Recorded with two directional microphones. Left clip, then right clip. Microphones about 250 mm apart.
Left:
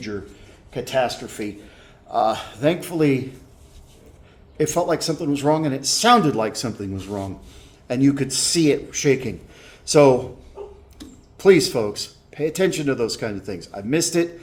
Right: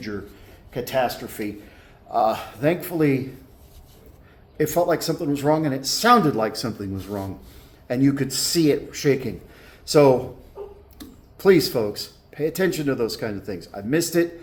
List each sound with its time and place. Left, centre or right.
0.7 s speech: centre
4.5 s a man's voice: centre
10.6 s a sound: left
11.3 s speech: centre